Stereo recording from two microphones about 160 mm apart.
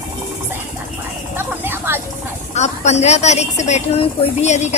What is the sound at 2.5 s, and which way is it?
A woman's voice, 45° left (ahead or behind).